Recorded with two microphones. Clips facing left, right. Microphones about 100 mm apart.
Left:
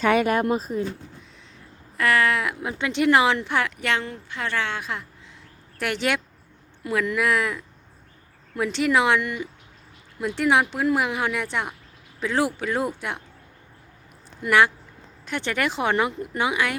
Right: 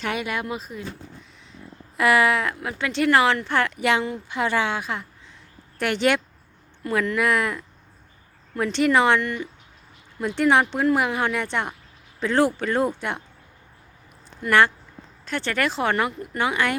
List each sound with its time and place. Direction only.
0.2 s speech: 45° left (ahead or behind)
2.0 s a woman's voice: 10° right (ahead or behind)
2.6 s speech: 20° left (ahead or behind)
3.8 s a woman's voice: 5° right (ahead or behind)
14.4 s speech: 10° left (ahead or behind)